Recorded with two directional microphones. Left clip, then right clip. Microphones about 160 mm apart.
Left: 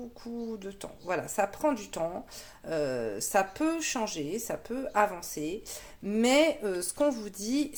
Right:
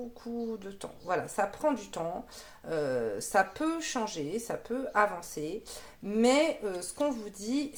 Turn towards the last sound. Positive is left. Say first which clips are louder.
# left 2 dB
turn(degrees=40)  # may be behind; listen again after turning